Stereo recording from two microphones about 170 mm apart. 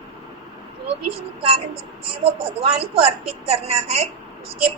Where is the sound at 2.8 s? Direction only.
35° right (ahead or behind).